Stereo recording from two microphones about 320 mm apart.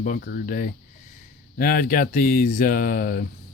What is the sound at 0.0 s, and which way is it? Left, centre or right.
Speech, left.